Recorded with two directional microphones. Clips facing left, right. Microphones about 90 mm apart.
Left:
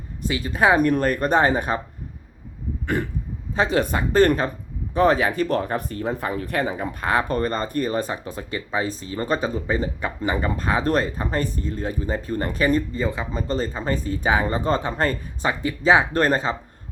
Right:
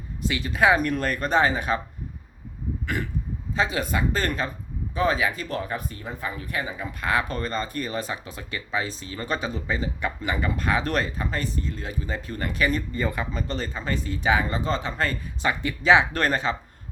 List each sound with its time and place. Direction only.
0.4 s speech: 35° left (ahead or behind)
3.5 s speech: 45° left (ahead or behind)
7.0 s speech: 35° left (ahead or behind)
13.0 s speech: 25° left (ahead or behind); by 15.1 s 40° left (ahead or behind)
15.4 s speech: 30° left (ahead or behind)